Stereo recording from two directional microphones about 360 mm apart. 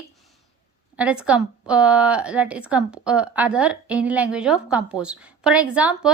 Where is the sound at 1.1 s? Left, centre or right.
Centre.